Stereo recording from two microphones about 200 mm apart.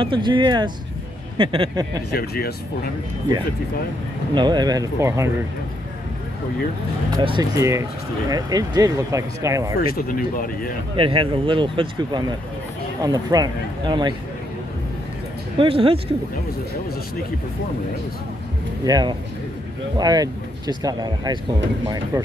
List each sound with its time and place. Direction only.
0.0 s speech: 25° right (ahead or behind)
2.1 s speech: 50° left (ahead or behind)
4.3 s speech: 20° right (ahead or behind)
7.2 s speech: 20° right (ahead or behind)
9.8 s speech: 45° left (ahead or behind)
11.0 s speech: 25° right (ahead or behind)
15.5 s speech: 25° right (ahead or behind)
18.9 s speech: 20° right (ahead or behind)